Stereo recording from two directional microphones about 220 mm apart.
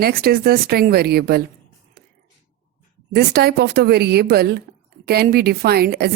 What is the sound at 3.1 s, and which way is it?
A woman's voice, 45° right (ahead or behind).